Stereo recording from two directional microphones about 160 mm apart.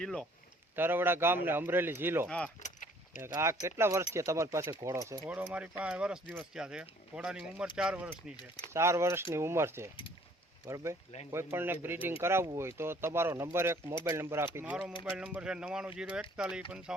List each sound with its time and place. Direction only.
0.0 s speech: 5° left (ahead or behind)
0.8 s speech: 15° right (ahead or behind)
8.4 s speech: 25° left (ahead or behind)
8.7 s speech: 15° right (ahead or behind)